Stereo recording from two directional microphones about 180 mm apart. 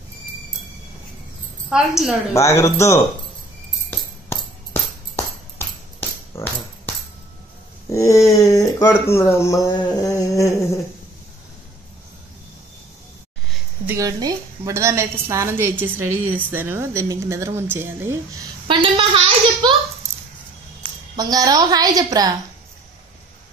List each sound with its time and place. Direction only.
1.7 s a woman's voice: centre (ahead or behind)
2.3 s speech: 15° left (ahead or behind)
5.9 s a sound: 10° left (ahead or behind)
7.9 s speech: 15° left (ahead or behind)
13.8 s a woman's voice: 20° right (ahead or behind)
21.2 s a woman's voice: 20° right (ahead or behind)